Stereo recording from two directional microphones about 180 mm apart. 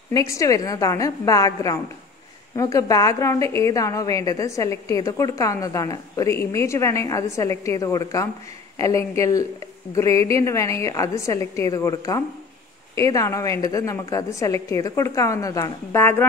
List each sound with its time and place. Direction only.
0.1 s a woman's voice: 20° left (ahead or behind)